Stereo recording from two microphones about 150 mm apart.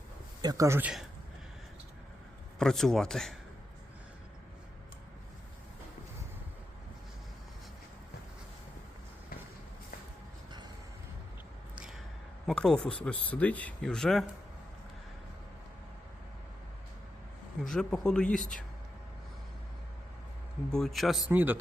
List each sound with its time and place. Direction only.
0.4 s speech: 20° right (ahead or behind)
2.6 s speech: centre (ahead or behind)
12.5 s speech: 5° left (ahead or behind)
17.6 s speech: 5° left (ahead or behind)
20.7 s speech: 5° left (ahead or behind)
21.2 s speech: 10° right (ahead or behind)